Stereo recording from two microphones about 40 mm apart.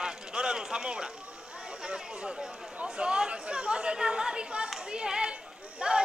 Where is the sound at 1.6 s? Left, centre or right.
Right.